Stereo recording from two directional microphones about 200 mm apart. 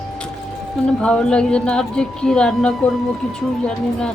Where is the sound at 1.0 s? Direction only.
5° left (ahead or behind).